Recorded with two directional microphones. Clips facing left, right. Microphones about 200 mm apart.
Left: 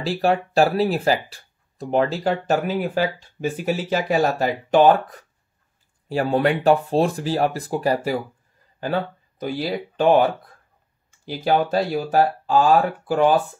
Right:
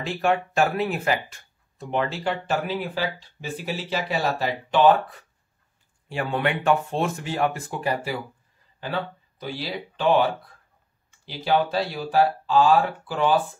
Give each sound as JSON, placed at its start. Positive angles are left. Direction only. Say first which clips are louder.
{"t": 0.0, "sound": "speech", "louder": "left 3 dB", "side_deg": 35}
{"t": 11.2, "sound": "speech", "louder": "left 3 dB", "side_deg": 45}